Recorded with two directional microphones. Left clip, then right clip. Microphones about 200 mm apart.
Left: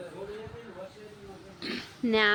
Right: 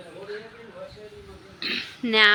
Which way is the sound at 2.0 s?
5° left (ahead or behind).